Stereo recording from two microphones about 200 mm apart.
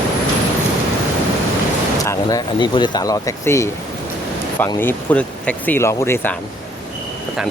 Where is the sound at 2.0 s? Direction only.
15° left (ahead or behind).